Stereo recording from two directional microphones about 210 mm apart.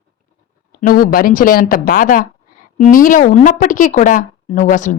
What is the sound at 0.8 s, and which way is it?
Speech, 45° left (ahead or behind).